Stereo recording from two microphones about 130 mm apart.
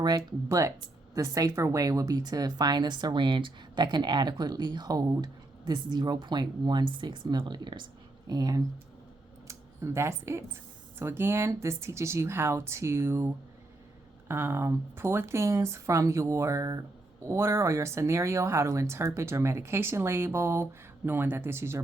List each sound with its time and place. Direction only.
0.0 s speech: 30° right (ahead or behind)